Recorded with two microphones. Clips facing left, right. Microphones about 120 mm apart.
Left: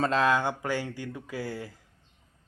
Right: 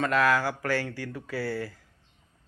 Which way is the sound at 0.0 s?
25° left (ahead or behind).